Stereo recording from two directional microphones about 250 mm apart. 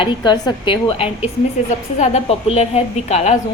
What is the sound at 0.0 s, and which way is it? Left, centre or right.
A woman's voice, centre.